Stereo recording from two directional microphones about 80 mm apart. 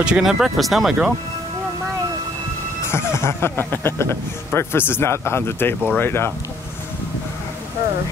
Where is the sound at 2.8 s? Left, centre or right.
Left.